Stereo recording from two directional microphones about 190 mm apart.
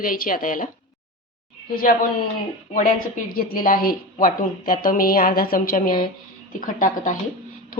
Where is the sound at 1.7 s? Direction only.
50° left (ahead or behind).